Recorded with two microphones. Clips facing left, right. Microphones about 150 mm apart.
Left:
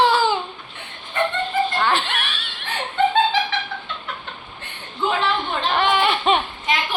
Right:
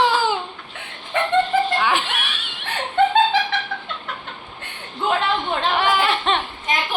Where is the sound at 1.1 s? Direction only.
90° right.